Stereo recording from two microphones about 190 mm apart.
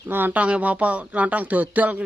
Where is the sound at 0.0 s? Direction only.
10° right (ahead or behind).